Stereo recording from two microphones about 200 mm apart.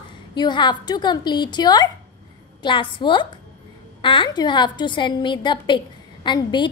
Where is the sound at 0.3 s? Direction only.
20° left (ahead or behind).